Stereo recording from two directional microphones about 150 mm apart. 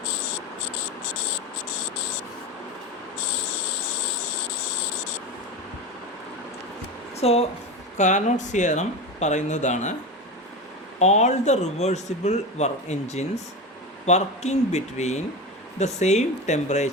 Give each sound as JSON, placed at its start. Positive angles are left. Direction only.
{"t": 7.2, "sound": "speech", "side_deg": 45}
{"t": 7.9, "sound": "speech", "side_deg": 55}
{"t": 11.0, "sound": "speech", "side_deg": 50}